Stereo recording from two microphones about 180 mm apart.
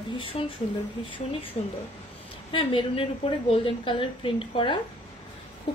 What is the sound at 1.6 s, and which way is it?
A woman's voice, 30° left (ahead or behind).